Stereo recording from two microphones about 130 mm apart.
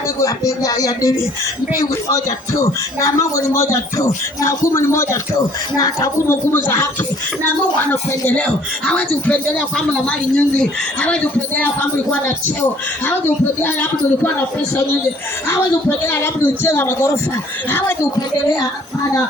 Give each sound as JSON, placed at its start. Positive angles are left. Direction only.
{"t": 0.2, "sound": "a man's voice", "side_deg": 25}
{"t": 6.5, "sound": "a man's voice", "side_deg": 15}
{"t": 8.9, "sound": "a man's voice", "side_deg": 10}
{"t": 13.1, "sound": "a man's voice", "side_deg": 15}
{"t": 16.0, "sound": "a man's voice", "side_deg": 20}